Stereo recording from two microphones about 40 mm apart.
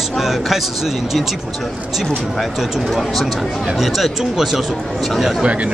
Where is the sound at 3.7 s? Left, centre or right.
Centre.